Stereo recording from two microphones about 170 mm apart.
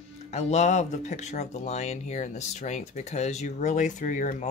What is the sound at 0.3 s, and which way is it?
Speech, 40° left (ahead or behind).